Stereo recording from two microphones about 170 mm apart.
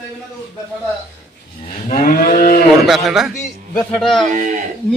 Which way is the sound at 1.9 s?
55° left (ahead or behind).